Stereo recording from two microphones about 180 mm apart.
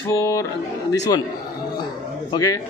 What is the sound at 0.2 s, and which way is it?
Speech, 15° left (ahead or behind).